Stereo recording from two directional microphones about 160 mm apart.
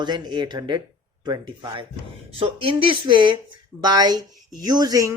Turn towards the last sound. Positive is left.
turn(degrees=-20)  # may be behind; listen again after turning